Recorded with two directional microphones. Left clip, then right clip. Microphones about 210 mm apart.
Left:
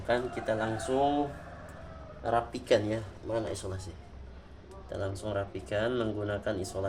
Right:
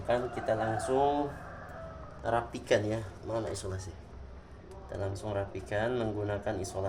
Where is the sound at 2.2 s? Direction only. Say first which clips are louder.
Left 2 dB; 20° left (ahead or behind).